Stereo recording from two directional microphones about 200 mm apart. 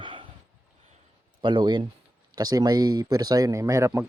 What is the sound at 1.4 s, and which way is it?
Speech, 25° right (ahead or behind).